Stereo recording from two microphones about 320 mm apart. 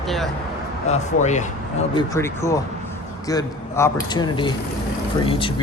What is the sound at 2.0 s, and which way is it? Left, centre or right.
Speech, centre.